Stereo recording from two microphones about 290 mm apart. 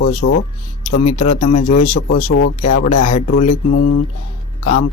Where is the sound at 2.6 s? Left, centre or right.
Left.